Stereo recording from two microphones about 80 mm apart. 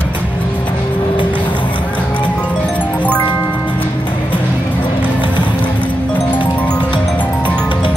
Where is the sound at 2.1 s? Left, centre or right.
Centre.